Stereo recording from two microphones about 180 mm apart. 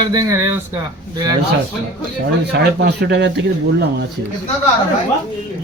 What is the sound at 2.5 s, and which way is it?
Speech, 70° right (ahead or behind).